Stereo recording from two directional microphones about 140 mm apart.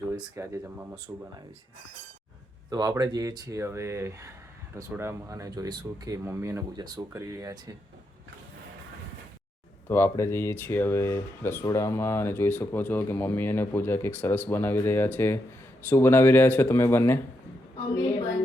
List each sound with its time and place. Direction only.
0.3 s speech: 20° right (ahead or behind)
2.6 s speech: 30° right (ahead or behind)
9.9 s speech: 20° left (ahead or behind)